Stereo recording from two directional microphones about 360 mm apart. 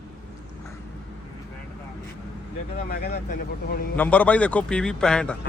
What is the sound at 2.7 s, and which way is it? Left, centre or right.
Speech, left.